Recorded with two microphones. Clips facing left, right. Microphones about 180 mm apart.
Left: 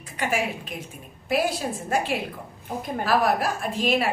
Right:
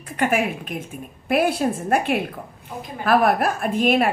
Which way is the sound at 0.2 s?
55° right (ahead or behind).